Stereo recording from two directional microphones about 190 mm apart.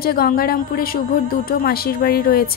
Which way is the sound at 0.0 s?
50° left (ahead or behind).